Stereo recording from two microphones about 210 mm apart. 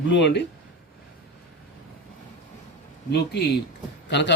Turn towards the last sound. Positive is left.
turn(degrees=55)  # may be behind; listen again after turning